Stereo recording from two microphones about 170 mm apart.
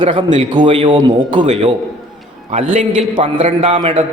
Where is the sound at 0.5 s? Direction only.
30° right (ahead or behind).